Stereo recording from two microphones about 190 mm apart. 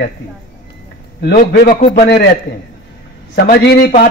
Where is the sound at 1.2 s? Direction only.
55° left (ahead or behind).